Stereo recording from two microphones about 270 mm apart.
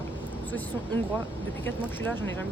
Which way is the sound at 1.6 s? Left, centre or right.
Centre.